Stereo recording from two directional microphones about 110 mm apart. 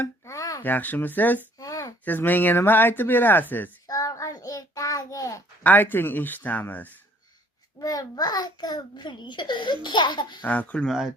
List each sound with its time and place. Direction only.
0.0 s a sound: 30° left (ahead or behind)
0.6 s speech: 15° left (ahead or behind)
1.5 s a sound: 30° left (ahead or behind)
2.0 s speech: 15° left (ahead or behind)
3.8 s child singing: 30° left (ahead or behind)
5.6 s speech: 15° left (ahead or behind)
7.8 s a child's voice: 35° left (ahead or behind)
10.4 s speech: 15° left (ahead or behind)
10.8 s speech: 5° right (ahead or behind)